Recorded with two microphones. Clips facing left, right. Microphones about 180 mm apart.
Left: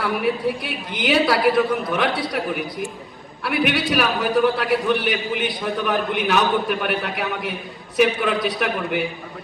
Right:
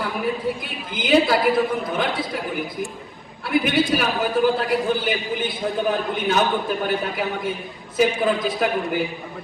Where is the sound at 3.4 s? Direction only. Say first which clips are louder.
Right 1 dB; 70° left (ahead or behind).